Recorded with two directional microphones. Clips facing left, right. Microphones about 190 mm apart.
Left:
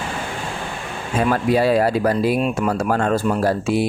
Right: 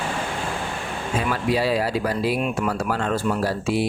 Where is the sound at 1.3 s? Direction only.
50° left (ahead or behind).